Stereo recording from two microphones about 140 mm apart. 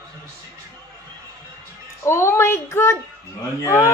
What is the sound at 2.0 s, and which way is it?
A woman's voice, 20° left (ahead or behind).